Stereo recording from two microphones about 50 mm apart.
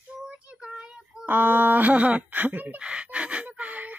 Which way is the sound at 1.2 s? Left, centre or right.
Right.